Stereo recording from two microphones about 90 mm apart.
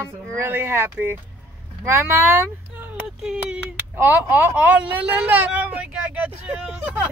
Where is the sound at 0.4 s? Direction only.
25° right (ahead or behind).